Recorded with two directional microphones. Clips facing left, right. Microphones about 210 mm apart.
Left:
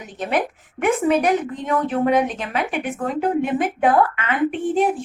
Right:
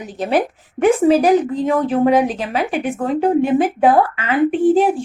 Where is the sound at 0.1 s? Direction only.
35° right (ahead or behind).